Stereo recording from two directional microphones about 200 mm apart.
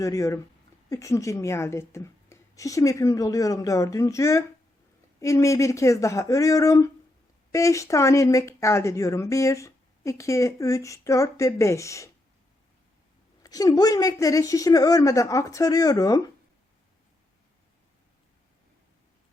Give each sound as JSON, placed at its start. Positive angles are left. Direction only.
{"t": 0.0, "sound": "speech", "side_deg": 15}
{"t": 13.4, "sound": "speech", "side_deg": 20}